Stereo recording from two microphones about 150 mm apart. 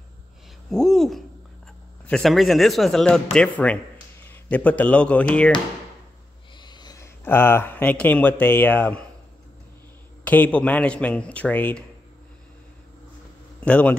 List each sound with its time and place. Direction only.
0.7 s speech: 5° left (ahead or behind)
6.6 s a sound: 30° left (ahead or behind)
7.2 s speech: 15° left (ahead or behind)
10.2 s speech: 10° left (ahead or behind)
13.6 s a man's voice: 10° left (ahead or behind)